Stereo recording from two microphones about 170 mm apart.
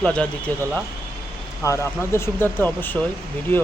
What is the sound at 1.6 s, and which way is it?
Speech, 15° left (ahead or behind).